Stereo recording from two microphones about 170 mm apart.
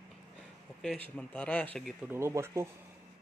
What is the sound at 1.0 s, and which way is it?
Speech, 5° left (ahead or behind).